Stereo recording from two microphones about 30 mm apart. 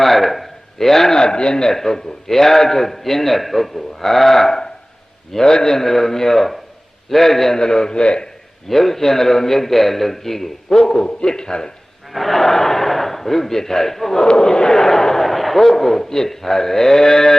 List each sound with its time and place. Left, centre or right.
0.0 s a sound: centre
1.1 s speech: left
1.6 s a man's voice: centre
7.5 s a man's voice: left
8.6 s a man's voice: centre; by 11.7 s left
12.1 s a man's voice: centre
14.3 s speech: left
14.8 s a man's voice: centre